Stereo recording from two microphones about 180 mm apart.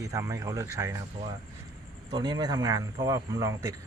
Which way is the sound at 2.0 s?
25° right (ahead or behind).